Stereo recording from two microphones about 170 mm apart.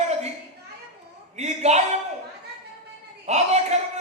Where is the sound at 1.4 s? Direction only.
40° right (ahead or behind).